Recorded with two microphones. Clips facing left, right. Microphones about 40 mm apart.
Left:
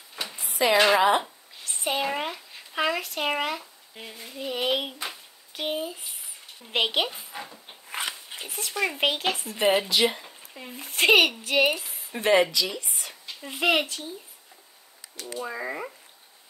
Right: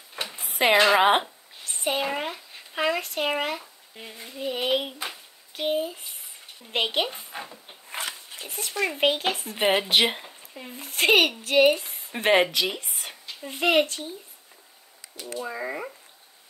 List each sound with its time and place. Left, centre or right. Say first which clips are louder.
0.2 s a sound: right 1 dB; right
0.7 s speech: right 1 dB; right
1.6 s speech: right 1 dB; centre
5.0 s a sound: right 1 dB; centre
7.3 s speech: right 1 dB; right
8.5 s speech: even; centre
9.8 s speech: right 1 dB; right
10.5 s speech: even; centre
12.2 s speech: even; right
13.4 s speech: right 2 dB; centre
15.3 s speech: right 1 dB; centre